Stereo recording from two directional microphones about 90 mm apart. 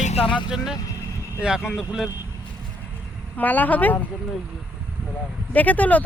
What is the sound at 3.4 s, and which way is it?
Speech, 20° left (ahead or behind).